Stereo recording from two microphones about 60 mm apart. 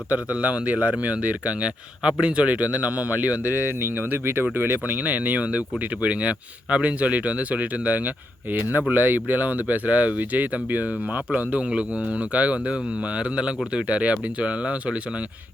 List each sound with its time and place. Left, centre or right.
0.1 s speech: right
3.8 s speech: right